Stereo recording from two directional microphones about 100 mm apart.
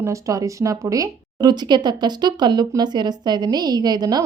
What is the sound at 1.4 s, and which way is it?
A woman's voice, 45° right (ahead or behind).